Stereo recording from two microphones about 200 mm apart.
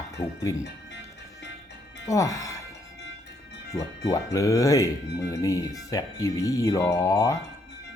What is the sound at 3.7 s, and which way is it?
Speech, 15° left (ahead or behind).